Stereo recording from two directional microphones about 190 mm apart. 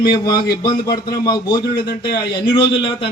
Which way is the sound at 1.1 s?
20° left (ahead or behind).